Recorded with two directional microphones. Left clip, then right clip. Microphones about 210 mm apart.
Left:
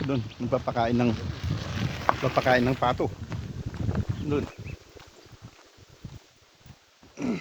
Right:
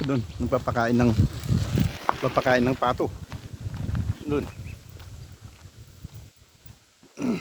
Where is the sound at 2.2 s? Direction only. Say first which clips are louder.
Right 2 dB; 20° right (ahead or behind).